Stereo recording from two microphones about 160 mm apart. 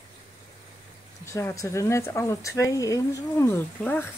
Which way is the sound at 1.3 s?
15° left (ahead or behind).